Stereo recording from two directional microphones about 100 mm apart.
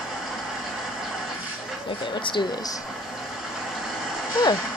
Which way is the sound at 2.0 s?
55° left (ahead or behind).